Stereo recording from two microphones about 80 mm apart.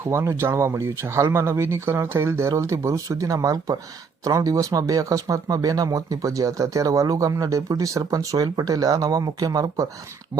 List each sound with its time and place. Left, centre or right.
0.0 s speech: right